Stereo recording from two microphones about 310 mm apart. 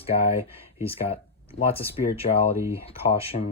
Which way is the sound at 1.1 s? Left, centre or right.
Centre.